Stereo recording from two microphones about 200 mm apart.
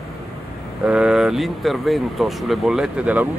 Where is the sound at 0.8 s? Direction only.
5° right (ahead or behind).